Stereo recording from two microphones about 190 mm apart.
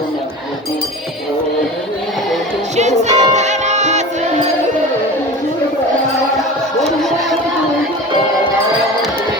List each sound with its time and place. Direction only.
3.0 s music: 35° right (ahead or behind)
6.8 s music: centre (ahead or behind)